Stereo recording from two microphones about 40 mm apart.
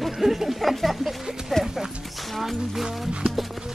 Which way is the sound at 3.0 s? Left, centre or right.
Right.